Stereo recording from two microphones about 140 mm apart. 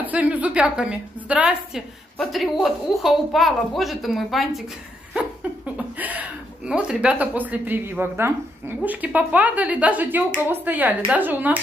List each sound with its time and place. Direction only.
0.0 s a woman's voice: 10° right (ahead or behind)
5.8 s a woman's voice: 10° right (ahead or behind)